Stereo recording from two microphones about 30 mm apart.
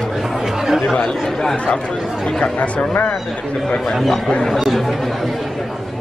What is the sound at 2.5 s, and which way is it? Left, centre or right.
Speech, left.